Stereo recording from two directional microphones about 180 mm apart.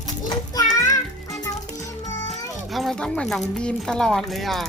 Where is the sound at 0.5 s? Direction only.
20° left (ahead or behind).